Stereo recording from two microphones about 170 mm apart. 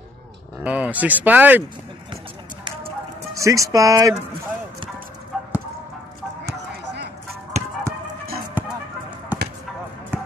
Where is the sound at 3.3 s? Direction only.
20° right (ahead or behind).